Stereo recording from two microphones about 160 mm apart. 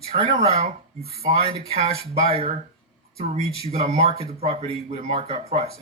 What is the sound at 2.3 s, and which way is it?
A man's voice, 40° right (ahead or behind).